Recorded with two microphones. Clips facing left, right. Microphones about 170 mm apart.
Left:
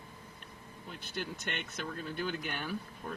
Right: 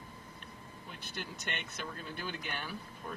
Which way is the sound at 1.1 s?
50° left (ahead or behind).